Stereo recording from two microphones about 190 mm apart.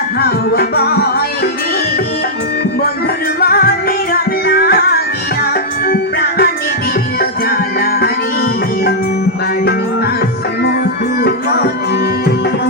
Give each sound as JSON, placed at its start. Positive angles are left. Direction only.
{"t": 0.2, "sound": "music", "side_deg": 55}
{"t": 3.4, "sound": "music", "side_deg": 55}
{"t": 7.8, "sound": "music", "side_deg": 55}
{"t": 11.2, "sound": "music", "side_deg": 55}